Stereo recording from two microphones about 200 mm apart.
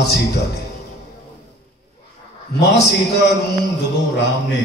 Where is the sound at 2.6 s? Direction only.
55° left (ahead or behind).